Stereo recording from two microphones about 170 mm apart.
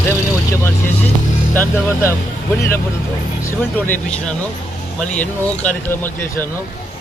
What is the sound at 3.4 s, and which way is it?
Speech, 10° left (ahead or behind).